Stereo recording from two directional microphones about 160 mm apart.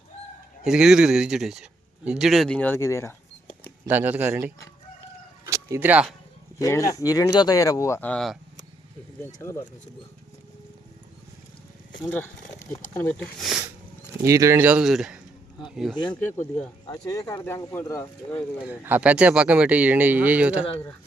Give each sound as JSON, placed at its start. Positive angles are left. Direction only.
{"t": 0.6, "sound": "speech", "side_deg": -5}
{"t": 3.8, "sound": "speech", "side_deg": -10}
{"t": 5.5, "sound": "chicken", "side_deg": -20}
{"t": 6.6, "sound": "speech", "side_deg": 20}
{"t": 9.2, "sound": "speech", "side_deg": 15}
{"t": 12.0, "sound": "speech", "side_deg": 10}
{"t": 13.4, "sound": "speech", "side_deg": -5}
{"t": 14.3, "sound": "speech", "side_deg": -20}
{"t": 16.8, "sound": "speech", "side_deg": 25}
{"t": 18.6, "sound": "speech", "side_deg": -10}